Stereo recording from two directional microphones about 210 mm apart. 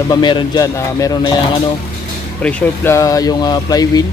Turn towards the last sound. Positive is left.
turn(degrees=20)  # may be behind; listen again after turning